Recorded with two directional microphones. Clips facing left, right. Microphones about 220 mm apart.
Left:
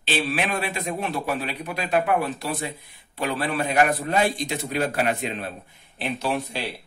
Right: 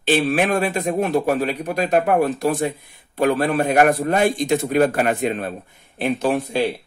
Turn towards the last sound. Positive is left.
turn(degrees=-50)  # may be behind; listen again after turning